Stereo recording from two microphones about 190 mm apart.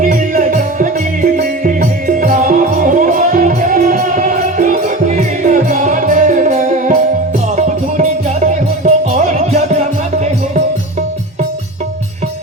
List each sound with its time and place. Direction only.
0.0 s music: 45° right (ahead or behind)
8.4 s music: 40° right (ahead or behind)